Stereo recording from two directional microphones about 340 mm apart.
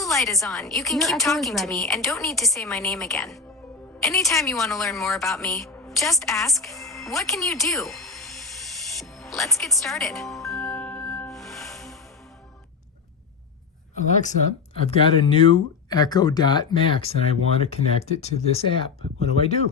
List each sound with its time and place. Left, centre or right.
0.0 s a woman's voice: centre
8.9 s music: centre
13.9 s speech: left
18.2 s speech: centre